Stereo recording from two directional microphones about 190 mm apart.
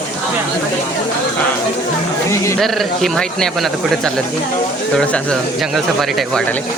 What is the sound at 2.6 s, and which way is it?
Speech, centre (ahead or behind).